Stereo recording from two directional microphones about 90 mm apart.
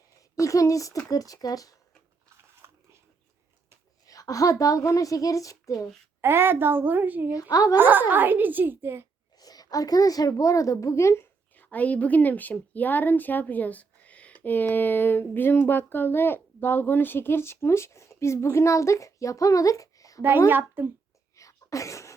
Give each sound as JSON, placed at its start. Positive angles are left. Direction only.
{"t": 0.2, "sound": "speech", "side_deg": 35}
{"t": 2.6, "sound": "a sound", "side_deg": -35}
{"t": 4.0, "sound": "a woman's voice", "side_deg": 40}
{"t": 6.2, "sound": "a child's voice", "side_deg": -25}
{"t": 7.3, "sound": "a woman's voice", "side_deg": 40}
{"t": 7.8, "sound": "a child's voice", "side_deg": -20}
{"t": 9.4, "sound": "a woman's voice", "side_deg": 45}
{"t": 11.5, "sound": "speech", "side_deg": 20}
{"t": 20.5, "sound": "a child's voice", "side_deg": -25}
{"t": 21.3, "sound": "sneeze", "side_deg": 35}